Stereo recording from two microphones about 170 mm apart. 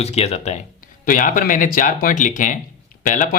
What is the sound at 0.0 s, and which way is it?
Speech, 40° left (ahead or behind).